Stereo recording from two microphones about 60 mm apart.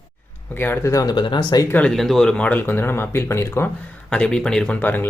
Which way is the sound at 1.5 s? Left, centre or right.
Left.